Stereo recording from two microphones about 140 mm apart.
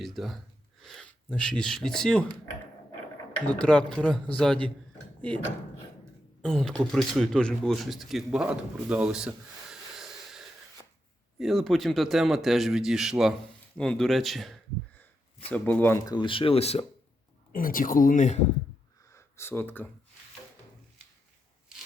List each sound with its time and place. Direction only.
0.0 s speech: centre (ahead or behind)
3.4 s speech: 10° left (ahead or behind)
6.4 s speech: 5° left (ahead or behind)
15.4 s speech: 10° left (ahead or behind)
16.0 s speech: 30° left (ahead or behind); by 16.8 s 45° left (ahead or behind)
17.5 s speech: 80° left; by 18.4 s 60° left (ahead or behind)
19.1 s speech: 20° left (ahead or behind)